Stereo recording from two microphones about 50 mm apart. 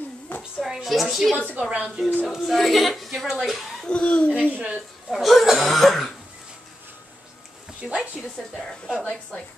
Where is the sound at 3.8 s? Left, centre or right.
Left.